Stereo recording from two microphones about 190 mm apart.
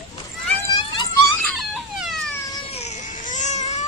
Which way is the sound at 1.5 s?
Centre (ahead or behind).